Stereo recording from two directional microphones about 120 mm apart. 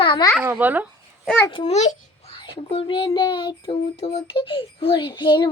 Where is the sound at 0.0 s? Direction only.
40° left (ahead or behind).